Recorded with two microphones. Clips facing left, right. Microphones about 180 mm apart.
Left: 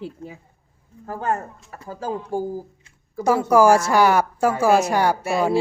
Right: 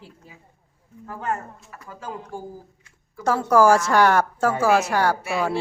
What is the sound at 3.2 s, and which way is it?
A woman's voice, 10° left (ahead or behind).